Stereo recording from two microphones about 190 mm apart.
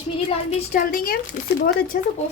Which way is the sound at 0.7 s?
50° left (ahead or behind).